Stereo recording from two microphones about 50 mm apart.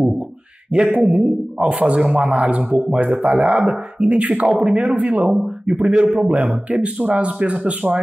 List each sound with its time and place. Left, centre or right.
0.9 s speech: right
2.5 s speech: right
5.3 s speech: centre
5.8 s speech: right